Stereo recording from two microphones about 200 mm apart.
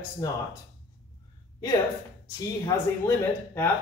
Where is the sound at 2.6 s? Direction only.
15° left (ahead or behind).